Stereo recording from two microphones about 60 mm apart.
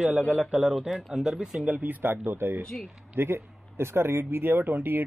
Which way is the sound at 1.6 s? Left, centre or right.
Right.